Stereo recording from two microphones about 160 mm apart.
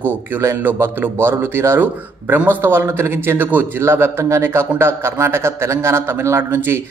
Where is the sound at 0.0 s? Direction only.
15° right (ahead or behind).